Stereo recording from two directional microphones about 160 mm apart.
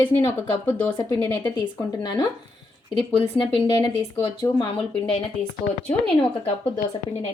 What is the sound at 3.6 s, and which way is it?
Speech, 35° left (ahead or behind).